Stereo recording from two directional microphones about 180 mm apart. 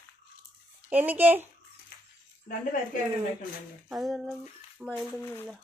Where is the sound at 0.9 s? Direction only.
10° right (ahead or behind).